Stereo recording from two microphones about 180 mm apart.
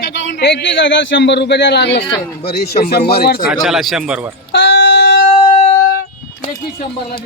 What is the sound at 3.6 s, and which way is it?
Speech, centre (ahead or behind).